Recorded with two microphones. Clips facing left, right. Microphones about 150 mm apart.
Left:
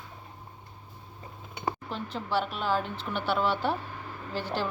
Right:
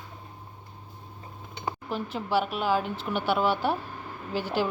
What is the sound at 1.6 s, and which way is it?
Speech, 5° right (ahead or behind).